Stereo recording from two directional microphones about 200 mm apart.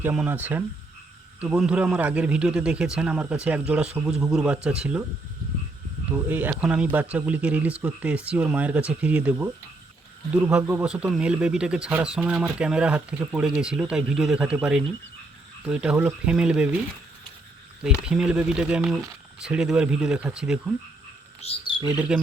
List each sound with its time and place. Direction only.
0.0 s speech: 5° right (ahead or behind)
6.1 s speech: 10° right (ahead or behind)
17.8 s speech: 5° right (ahead or behind)
21.4 s speech: 30° left (ahead or behind)
21.8 s speech: 5° right (ahead or behind)